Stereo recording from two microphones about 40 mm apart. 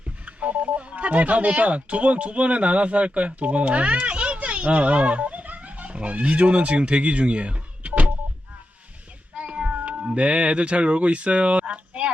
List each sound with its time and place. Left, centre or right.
0.3 s speech: right
9.4 s cat: right
9.7 s speech: right